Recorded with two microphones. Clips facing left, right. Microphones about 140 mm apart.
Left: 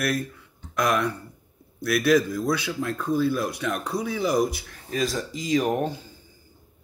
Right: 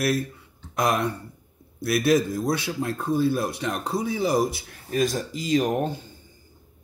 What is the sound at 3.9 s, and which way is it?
Speech, 55° left (ahead or behind).